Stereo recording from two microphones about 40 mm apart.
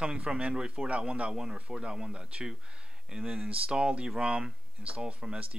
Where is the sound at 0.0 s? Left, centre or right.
Right.